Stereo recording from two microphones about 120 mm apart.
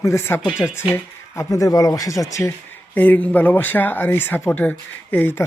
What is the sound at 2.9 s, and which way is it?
Speech, 15° left (ahead or behind).